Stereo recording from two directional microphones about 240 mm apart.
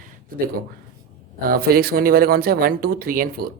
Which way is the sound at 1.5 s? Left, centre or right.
Right.